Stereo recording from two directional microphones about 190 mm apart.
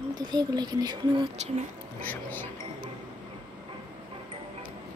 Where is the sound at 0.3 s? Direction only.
20° right (ahead or behind).